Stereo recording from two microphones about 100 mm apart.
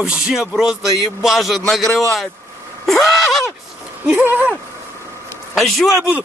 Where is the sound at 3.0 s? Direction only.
Centre (ahead or behind).